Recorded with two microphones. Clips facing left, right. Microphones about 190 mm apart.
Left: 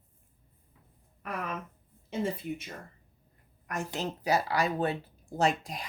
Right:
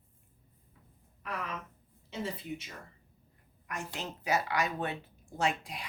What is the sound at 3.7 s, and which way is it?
A woman's voice, 40° left (ahead or behind).